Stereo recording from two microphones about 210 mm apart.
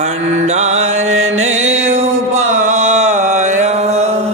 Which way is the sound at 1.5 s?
35° right (ahead or behind).